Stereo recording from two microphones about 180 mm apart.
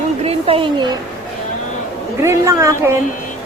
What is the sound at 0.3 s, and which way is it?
Speech, 30° right (ahead or behind).